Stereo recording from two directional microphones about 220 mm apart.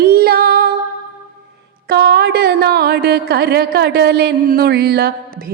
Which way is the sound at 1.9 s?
50° right (ahead or behind).